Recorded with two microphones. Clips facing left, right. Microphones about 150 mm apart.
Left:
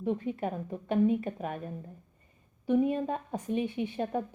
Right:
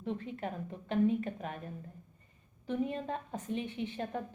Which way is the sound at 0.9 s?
15° left (ahead or behind).